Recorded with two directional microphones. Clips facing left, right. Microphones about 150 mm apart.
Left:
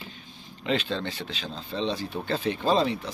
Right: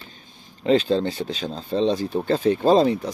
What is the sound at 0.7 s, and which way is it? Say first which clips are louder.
A man's voice: right 9 dB; 35° right (ahead or behind).